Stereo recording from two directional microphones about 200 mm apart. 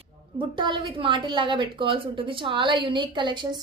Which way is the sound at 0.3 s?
25° right (ahead or behind).